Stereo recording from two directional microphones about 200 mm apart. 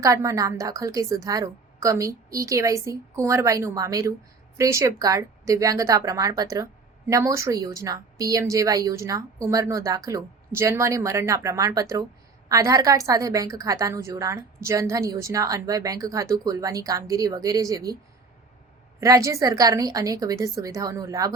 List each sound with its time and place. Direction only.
0.0 s a woman's voice: 15° right (ahead or behind)
18.9 s a woman's voice: 15° right (ahead or behind)